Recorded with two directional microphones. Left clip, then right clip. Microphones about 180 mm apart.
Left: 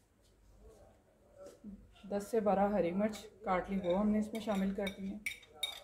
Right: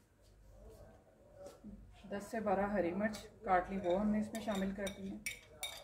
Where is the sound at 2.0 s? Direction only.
55° left (ahead or behind).